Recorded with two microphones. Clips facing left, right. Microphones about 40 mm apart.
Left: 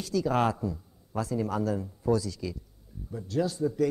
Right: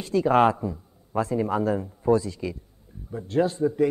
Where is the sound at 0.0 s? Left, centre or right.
Right.